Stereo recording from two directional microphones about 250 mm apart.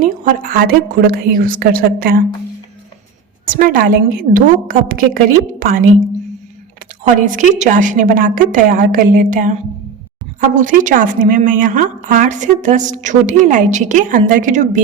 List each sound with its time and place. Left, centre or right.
0.0 s a woman's voice: right
3.4 s a woman's voice: right
7.2 s a woman's voice: right